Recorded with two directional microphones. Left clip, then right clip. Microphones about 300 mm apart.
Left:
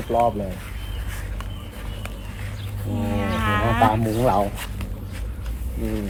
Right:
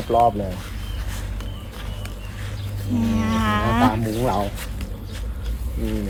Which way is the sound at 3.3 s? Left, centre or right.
Centre.